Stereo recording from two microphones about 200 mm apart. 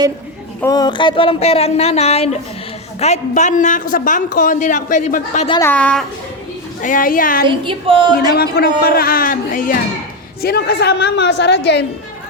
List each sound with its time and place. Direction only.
0.6 s a man's voice: 20° left (ahead or behind); by 5.5 s 35° left (ahead or behind)
5.5 s a woman's voice: 15° left (ahead or behind)
6.8 s a man's voice: 45° left (ahead or behind)
7.4 s a woman's voice: 25° right (ahead or behind)
8.4 s a man's voice: 50° left (ahead or behind)
10.4 s a woman's voice: 55° left (ahead or behind)